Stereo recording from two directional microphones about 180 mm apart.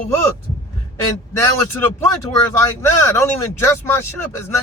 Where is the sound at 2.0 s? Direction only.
15° left (ahead or behind).